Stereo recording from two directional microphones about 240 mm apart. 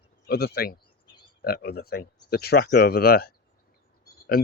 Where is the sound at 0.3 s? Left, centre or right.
Left.